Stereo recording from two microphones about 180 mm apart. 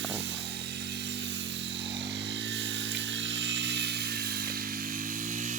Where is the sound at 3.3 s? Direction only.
85° right.